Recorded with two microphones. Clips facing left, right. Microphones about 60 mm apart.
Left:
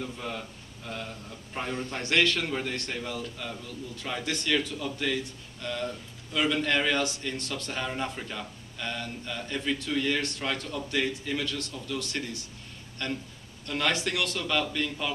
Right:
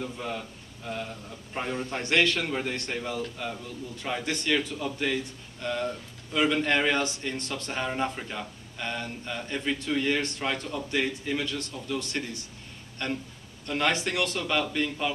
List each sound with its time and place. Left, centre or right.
0.0 s a man's voice: centre